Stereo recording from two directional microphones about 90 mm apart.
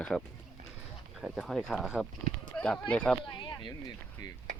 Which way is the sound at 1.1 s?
Centre (ahead or behind).